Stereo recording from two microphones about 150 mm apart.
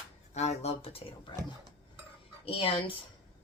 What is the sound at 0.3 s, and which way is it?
Speech, 45° left (ahead or behind).